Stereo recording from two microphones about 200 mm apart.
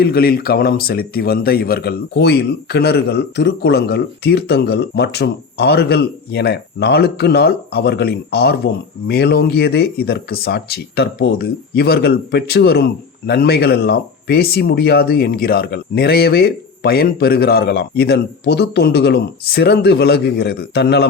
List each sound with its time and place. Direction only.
0.0 s speech: 50° left (ahead or behind)